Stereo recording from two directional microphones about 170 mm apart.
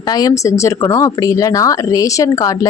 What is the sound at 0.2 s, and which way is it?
Speech, 20° left (ahead or behind).